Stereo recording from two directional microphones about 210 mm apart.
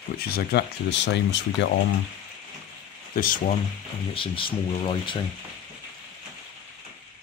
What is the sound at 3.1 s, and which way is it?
Speech, 40° left (ahead or behind).